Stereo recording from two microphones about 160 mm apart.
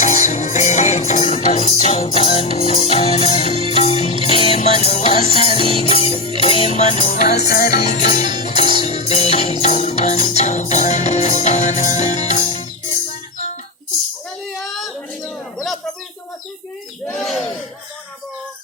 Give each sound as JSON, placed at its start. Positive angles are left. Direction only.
{"t": 0.0, "sound": "music", "side_deg": 50}
{"t": 7.1, "sound": "music", "side_deg": 65}
{"t": 8.0, "sound": "music", "side_deg": 45}
{"t": 17.1, "sound": "a sound", "side_deg": 0}